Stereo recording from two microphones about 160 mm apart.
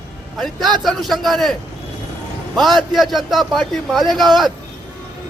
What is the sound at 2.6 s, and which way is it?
A man's voice, centre (ahead or behind).